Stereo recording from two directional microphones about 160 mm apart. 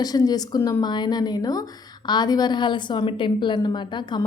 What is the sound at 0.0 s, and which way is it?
A woman's voice, 25° left (ahead or behind).